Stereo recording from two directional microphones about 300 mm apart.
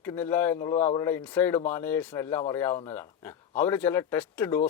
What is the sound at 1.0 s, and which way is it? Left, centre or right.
Speech, centre.